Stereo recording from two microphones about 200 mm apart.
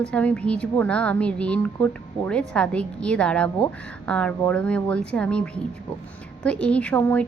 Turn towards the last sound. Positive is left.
turn(degrees=10)  # may be behind; listen again after turning